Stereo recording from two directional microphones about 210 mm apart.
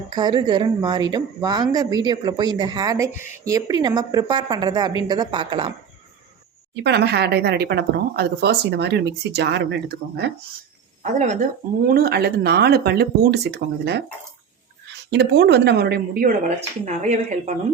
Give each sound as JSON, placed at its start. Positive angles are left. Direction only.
{"t": 0.1, "sound": "a woman's voice", "side_deg": -20}
{"t": 6.8, "sound": "speech", "side_deg": -50}
{"t": 11.0, "sound": "speech", "side_deg": -35}
{"t": 11.9, "sound": "speech", "side_deg": -45}
{"t": 15.1, "sound": "speech", "side_deg": -55}
{"t": 16.8, "sound": "speech", "side_deg": -35}